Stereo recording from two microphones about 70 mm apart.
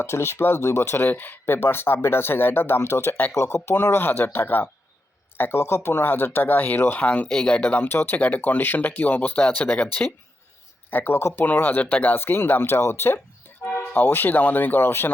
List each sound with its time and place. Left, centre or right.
0.0 s speech: left
7.3 s speech: centre
7.6 s speech: left
10.9 s speech: left
11.3 s speech: left